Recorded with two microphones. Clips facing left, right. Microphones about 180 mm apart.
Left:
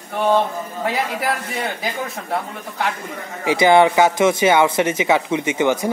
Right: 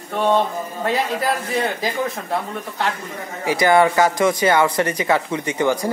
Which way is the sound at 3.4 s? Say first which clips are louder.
Left 2 dB; 20° left (ahead or behind).